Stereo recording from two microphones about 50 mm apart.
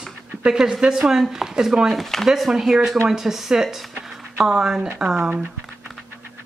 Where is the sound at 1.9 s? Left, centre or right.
Centre.